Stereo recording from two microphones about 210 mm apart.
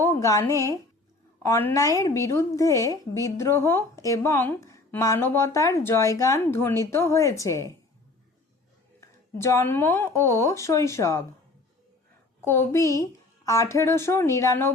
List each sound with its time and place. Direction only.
0.0 s a woman's voice: 15° left (ahead or behind)
9.0 s a woman's voice: 15° left (ahead or behind)
12.4 s a woman's voice: 10° left (ahead or behind)